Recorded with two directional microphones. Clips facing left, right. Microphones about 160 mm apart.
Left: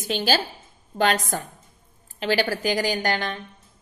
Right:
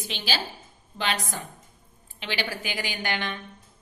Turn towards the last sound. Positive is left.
turn(degrees=40)  # may be behind; listen again after turning